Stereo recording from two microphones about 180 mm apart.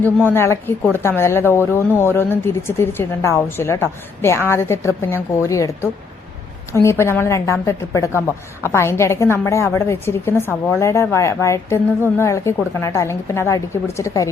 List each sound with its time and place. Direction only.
0.3 s a woman's voice: 15° left (ahead or behind)